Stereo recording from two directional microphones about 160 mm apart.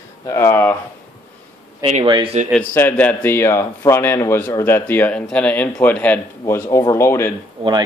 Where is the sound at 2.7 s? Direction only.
10° left (ahead or behind).